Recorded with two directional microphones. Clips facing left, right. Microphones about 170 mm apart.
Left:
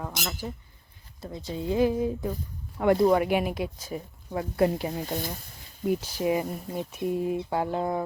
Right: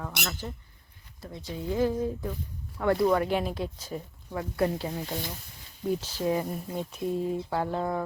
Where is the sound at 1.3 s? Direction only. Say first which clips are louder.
Left 3 dB; 20° left (ahead or behind).